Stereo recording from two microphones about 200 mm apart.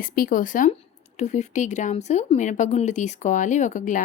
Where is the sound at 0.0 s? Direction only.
45° left (ahead or behind).